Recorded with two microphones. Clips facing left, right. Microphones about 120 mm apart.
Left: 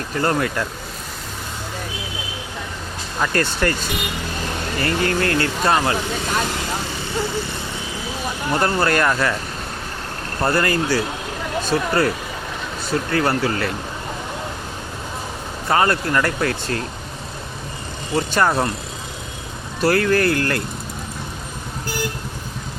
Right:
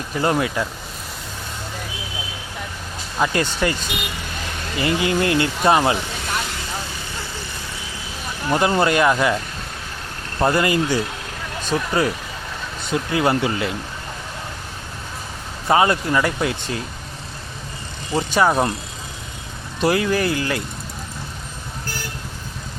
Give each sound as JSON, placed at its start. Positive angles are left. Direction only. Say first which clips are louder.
{"t": 0.2, "sound": "speech", "louder": "even", "side_deg": -10}
{"t": 3.2, "sound": "speech", "louder": "even", "side_deg": -10}
{"t": 4.8, "sound": "speech", "louder": "right 1 dB", "side_deg": -10}
{"t": 8.5, "sound": "speech", "louder": "right 2 dB", "side_deg": -15}
{"t": 10.4, "sound": "speech", "louder": "right 1 dB", "side_deg": -15}
{"t": 15.7, "sound": "speech", "louder": "right 1 dB", "side_deg": -15}
{"t": 18.3, "sound": "speech", "louder": "right 2 dB", "side_deg": -10}
{"t": 19.8, "sound": "speech", "louder": "left 2 dB", "side_deg": -15}